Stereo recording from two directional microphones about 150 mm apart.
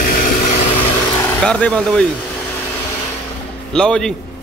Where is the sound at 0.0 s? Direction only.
70° left (ahead or behind).